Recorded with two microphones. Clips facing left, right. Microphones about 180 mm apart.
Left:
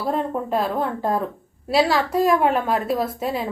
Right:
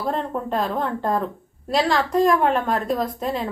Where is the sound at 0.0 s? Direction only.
5° left (ahead or behind).